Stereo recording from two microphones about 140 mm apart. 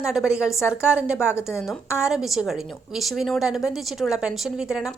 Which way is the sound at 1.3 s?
20° left (ahead or behind).